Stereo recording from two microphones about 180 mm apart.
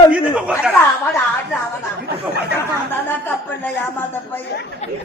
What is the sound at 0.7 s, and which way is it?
Speech, 10° left (ahead or behind).